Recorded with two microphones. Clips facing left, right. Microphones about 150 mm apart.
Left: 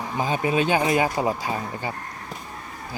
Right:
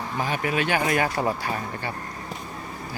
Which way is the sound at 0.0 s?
20° left (ahead or behind).